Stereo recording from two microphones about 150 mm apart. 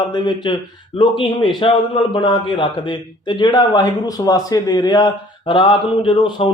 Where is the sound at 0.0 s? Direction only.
30° left (ahead or behind).